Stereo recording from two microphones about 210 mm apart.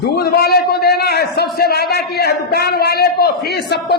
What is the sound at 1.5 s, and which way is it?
A man's voice, 50° left (ahead or behind).